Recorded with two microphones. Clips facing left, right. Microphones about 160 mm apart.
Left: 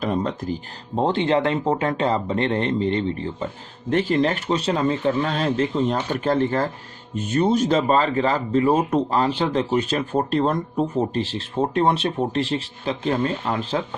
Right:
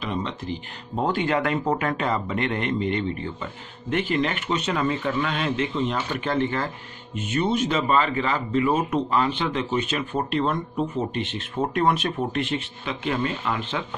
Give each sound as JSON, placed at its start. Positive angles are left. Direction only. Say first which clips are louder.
{"t": 0.0, "sound": "speech", "louder": "left 5 dB", "side_deg": 45}
{"t": 0.9, "sound": "speech", "louder": "left 4 dB", "side_deg": 25}